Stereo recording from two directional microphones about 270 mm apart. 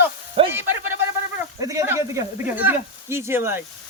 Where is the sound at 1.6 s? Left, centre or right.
Centre.